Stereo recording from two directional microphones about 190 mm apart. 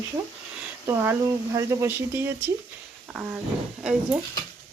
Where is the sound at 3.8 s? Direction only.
5° right (ahead or behind).